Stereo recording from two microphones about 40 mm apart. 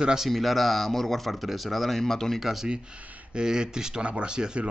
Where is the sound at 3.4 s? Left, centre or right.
Right.